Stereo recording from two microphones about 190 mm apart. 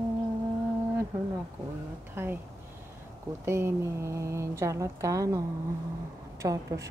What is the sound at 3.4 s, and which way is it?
Speech, 15° right (ahead or behind).